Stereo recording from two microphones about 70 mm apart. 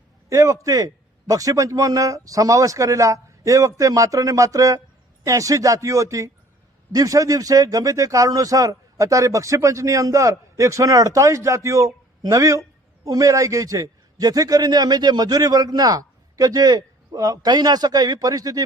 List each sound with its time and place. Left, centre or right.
0.3 s a man's voice: right